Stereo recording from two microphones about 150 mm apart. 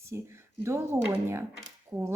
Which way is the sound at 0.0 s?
20° right (ahead or behind).